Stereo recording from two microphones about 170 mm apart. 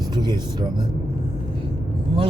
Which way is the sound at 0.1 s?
25° right (ahead or behind).